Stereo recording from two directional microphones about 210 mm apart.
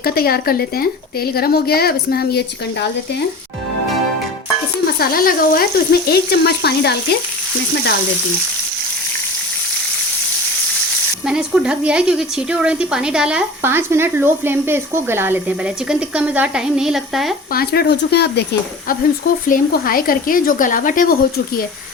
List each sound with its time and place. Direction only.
0.0 s speech: 45° left (ahead or behind)
4.9 s speech: 45° left (ahead or behind)
11.3 s a woman's voice: 5° right (ahead or behind)
17.5 s speech: 45° left (ahead or behind)
19.5 s a woman's voice: 40° left (ahead or behind)